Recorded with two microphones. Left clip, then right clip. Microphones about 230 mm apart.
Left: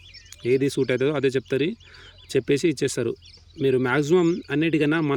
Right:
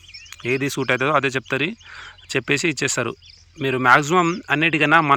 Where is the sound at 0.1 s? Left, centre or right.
Centre.